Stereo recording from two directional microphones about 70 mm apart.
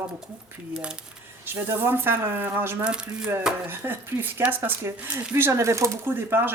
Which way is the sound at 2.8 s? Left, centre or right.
Centre.